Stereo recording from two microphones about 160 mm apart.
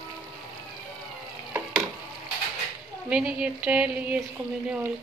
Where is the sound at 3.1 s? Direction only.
5° right (ahead or behind).